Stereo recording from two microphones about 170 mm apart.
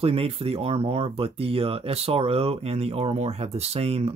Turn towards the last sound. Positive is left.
turn(degrees=-35)  # may be behind; listen again after turning